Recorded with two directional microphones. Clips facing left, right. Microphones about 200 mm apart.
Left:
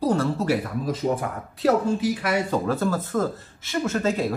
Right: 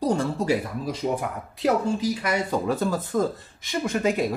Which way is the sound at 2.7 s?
15° right (ahead or behind).